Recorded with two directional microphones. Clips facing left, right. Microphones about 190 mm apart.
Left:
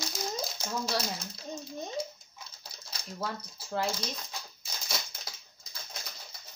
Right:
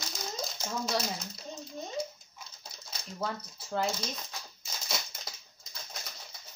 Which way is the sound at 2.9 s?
Centre (ahead or behind).